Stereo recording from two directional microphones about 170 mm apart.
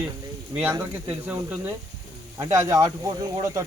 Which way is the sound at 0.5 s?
10° right (ahead or behind).